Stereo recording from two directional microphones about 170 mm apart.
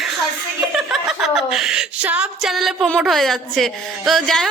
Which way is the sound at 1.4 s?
5° right (ahead or behind).